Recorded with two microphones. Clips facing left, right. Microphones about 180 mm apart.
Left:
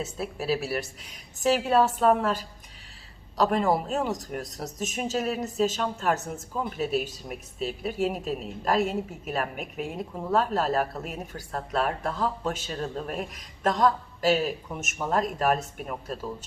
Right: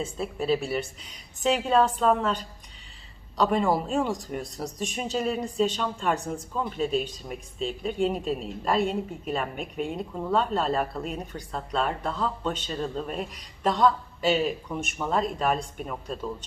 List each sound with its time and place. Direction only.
0.0 s speech: 5° left (ahead or behind)